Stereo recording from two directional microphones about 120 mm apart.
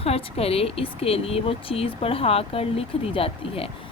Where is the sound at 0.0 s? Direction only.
55° left (ahead or behind).